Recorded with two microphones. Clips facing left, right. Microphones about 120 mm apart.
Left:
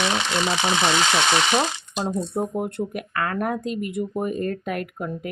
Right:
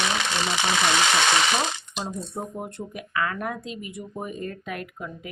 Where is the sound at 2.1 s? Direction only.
75° left (ahead or behind).